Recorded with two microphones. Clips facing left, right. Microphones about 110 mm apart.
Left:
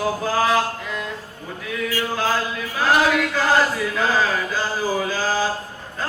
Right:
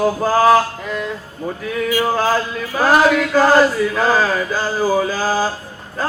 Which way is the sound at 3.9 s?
40° right (ahead or behind).